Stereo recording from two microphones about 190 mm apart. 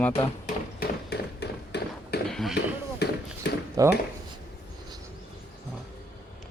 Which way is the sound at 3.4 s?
65° left (ahead or behind).